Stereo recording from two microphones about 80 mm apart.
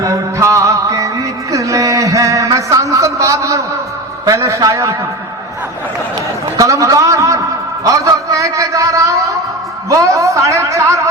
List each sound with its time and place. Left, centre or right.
0.0 s music: right
4.3 s a man's voice: right
6.6 s a sound: right
7.9 s a man's voice: right